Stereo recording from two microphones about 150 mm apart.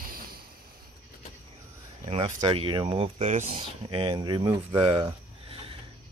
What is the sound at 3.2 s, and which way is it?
Speech, 55° right (ahead or behind).